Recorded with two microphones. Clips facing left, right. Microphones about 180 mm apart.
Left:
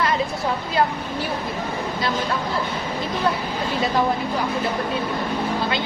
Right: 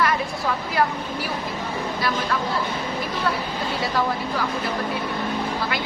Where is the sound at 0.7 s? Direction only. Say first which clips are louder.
Left 1 dB; 25° left (ahead or behind).